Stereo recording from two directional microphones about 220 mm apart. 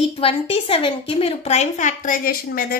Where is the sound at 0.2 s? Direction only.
25° left (ahead or behind).